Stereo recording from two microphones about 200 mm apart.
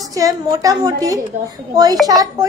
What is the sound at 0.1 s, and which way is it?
A woman's voice, 15° right (ahead or behind).